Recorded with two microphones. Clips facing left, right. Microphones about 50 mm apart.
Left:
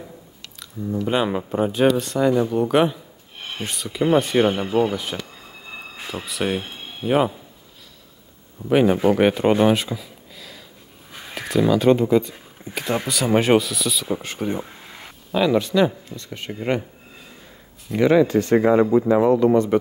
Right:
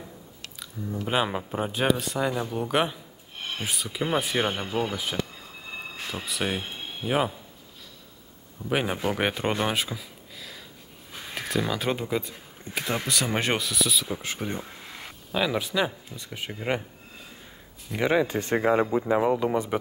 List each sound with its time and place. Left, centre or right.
1.0 s speech: centre
5.3 s a sound: centre
8.6 s speech: centre
11.1 s a sound: centre
11.4 s speech: centre
18.0 s speech: centre
18.6 s speech: centre